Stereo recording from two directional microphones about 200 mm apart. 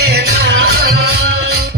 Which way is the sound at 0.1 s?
55° right (ahead or behind).